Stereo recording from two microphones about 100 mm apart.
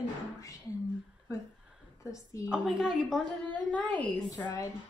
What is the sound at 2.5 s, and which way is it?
Speech, 5° right (ahead or behind).